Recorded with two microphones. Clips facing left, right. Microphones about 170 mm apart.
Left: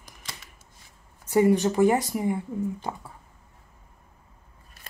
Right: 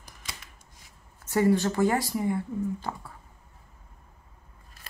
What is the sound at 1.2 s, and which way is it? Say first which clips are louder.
Speech: left 3 dB; 15° left (ahead or behind).